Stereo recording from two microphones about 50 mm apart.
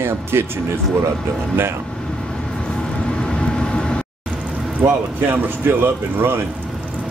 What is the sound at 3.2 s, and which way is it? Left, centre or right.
Vehicle, centre.